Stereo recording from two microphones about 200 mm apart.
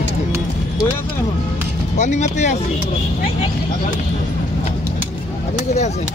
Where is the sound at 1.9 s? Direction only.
35° left (ahead or behind).